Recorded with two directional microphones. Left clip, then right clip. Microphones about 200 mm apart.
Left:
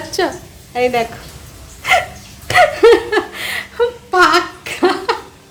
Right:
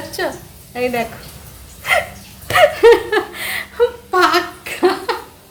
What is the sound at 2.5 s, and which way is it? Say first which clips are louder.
Laughter: left 1 dB; 20° left (ahead or behind).